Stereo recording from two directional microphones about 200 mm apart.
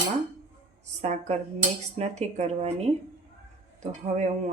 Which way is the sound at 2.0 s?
35° right (ahead or behind).